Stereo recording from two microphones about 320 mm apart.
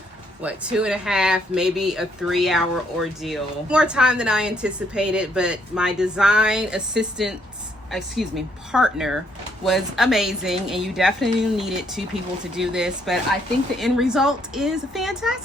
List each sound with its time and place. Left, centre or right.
0.4 s a woman's voice: centre